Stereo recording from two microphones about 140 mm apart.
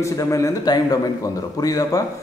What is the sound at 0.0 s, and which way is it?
A man's voice, 25° left (ahead or behind).